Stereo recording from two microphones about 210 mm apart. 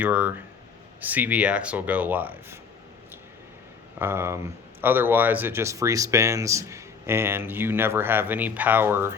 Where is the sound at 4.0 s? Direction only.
10° right (ahead or behind).